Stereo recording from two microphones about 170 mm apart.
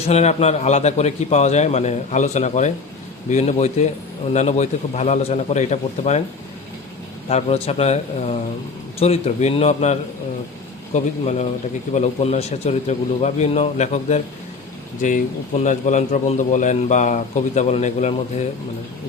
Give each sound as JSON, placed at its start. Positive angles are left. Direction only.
{"t": 0.1, "sound": "a man's voice", "side_deg": 40}
{"t": 7.3, "sound": "a man's voice", "side_deg": 35}